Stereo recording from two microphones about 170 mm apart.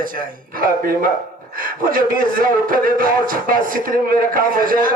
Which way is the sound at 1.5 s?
55° right (ahead or behind).